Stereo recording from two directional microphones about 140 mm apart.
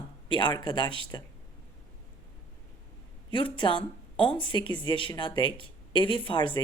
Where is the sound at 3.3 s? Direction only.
35° left (ahead or behind).